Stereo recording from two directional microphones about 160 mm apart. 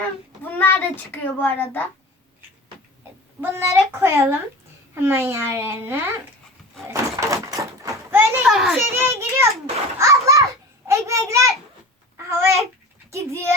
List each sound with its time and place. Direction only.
0.4 s a child's voice: 10° left (ahead or behind)
3.4 s a child's voice: 15° right (ahead or behind)
6.9 s a sound: 20° right (ahead or behind)
8.4 s children playing: centre (ahead or behind)
8.9 s a child's voice: 15° right (ahead or behind)
10.0 s children playing: 20° right (ahead or behind)
10.8 s a child's voice: 20° right (ahead or behind)
12.1 s babbling: 15° right (ahead or behind)
13.1 s speech: 15° right (ahead or behind)